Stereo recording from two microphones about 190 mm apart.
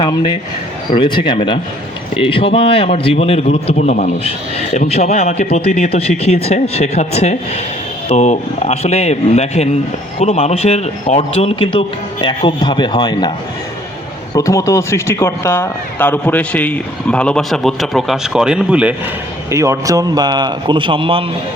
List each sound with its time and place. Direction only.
0.0 s a man's voice: 25° left (ahead or behind)
14.3 s a man's voice: 15° left (ahead or behind); by 21.2 s 30° right (ahead or behind)